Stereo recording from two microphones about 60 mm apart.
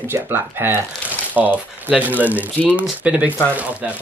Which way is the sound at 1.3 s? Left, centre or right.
Right.